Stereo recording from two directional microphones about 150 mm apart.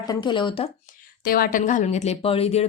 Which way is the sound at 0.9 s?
80° left.